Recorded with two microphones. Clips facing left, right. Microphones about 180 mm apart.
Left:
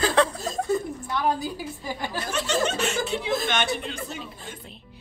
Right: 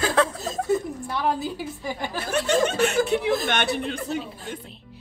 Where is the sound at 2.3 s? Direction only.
55° right (ahead or behind).